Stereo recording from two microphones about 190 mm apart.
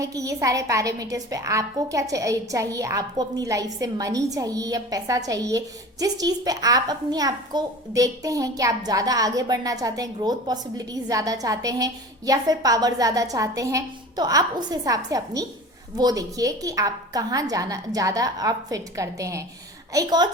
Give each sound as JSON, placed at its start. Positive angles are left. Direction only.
{"t": 0.0, "sound": "a woman's voice", "side_deg": -15}